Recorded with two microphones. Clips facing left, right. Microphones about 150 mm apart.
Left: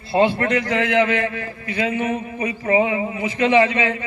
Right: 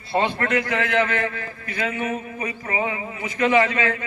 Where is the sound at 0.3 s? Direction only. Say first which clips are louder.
Left 3 dB; 40° left (ahead or behind).